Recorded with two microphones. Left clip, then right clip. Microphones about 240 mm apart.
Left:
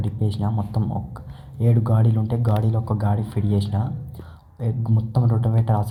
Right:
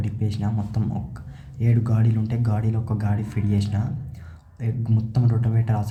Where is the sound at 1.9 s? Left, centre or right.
Centre.